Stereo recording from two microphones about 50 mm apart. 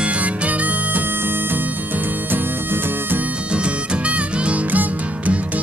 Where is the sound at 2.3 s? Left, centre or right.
Right.